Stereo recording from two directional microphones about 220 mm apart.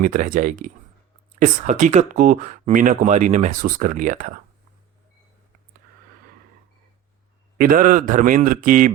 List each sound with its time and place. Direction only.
0.0 s speech: 40° right (ahead or behind)
7.6 s speech: 40° right (ahead or behind)